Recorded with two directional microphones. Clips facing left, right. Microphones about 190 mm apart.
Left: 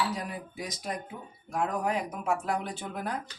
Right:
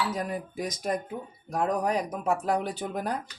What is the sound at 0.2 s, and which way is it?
Speech, 45° right (ahead or behind).